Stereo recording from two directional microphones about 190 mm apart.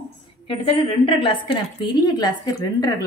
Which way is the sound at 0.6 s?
30° left (ahead or behind).